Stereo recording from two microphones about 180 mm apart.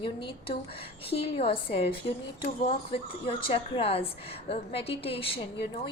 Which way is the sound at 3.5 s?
30° left (ahead or behind).